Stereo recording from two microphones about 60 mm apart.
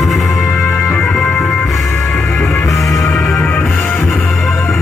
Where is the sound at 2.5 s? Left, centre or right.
Left.